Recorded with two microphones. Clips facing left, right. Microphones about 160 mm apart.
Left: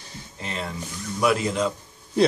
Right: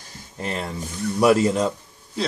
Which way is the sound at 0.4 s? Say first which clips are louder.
Right 4 dB; 45° right (ahead or behind).